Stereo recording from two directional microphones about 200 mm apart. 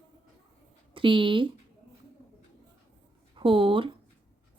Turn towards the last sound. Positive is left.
turn(degrees=-25)  # may be behind; listen again after turning